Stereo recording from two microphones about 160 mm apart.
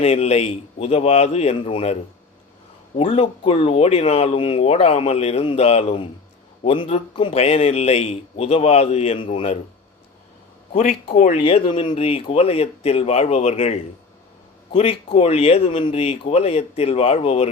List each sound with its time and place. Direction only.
0.0 s speech: 40° left (ahead or behind)
3.0 s speech: 35° left (ahead or behind)
10.7 s speech: 60° left (ahead or behind)
11.1 s speech: 45° left (ahead or behind)
11.4 s speech: 35° left (ahead or behind)